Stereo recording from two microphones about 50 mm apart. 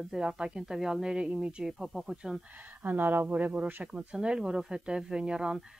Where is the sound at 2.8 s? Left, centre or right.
Right.